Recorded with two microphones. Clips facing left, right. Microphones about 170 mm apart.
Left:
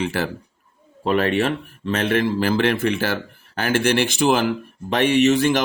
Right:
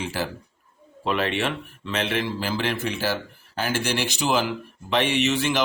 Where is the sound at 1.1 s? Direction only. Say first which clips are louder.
Left 5 dB; 45° left (ahead or behind).